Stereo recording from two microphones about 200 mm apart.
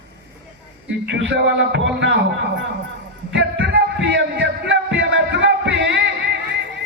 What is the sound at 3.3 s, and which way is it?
Music, 60° right (ahead or behind).